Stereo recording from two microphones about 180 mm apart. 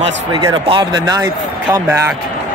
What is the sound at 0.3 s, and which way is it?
Speech, 25° right (ahead or behind).